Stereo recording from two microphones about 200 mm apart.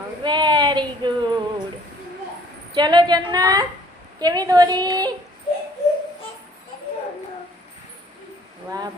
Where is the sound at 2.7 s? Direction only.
20° right (ahead or behind).